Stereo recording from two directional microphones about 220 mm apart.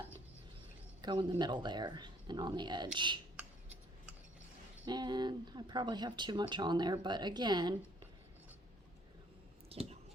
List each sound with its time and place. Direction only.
1.0 s speech: 20° right (ahead or behind)
4.9 s speech: 20° right (ahead or behind)
9.6 s a sound: 25° right (ahead or behind)